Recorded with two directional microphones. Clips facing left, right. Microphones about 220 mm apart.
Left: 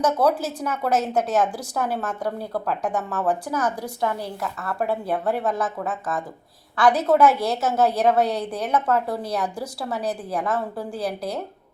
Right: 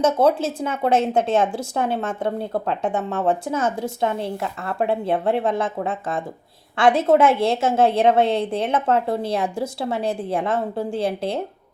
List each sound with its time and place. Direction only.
0.0 s a woman's voice: 25° right (ahead or behind)